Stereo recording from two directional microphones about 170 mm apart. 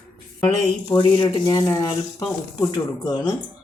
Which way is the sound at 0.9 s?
30° left (ahead or behind).